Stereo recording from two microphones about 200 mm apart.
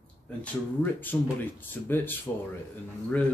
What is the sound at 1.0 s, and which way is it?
Speech, 10° left (ahead or behind).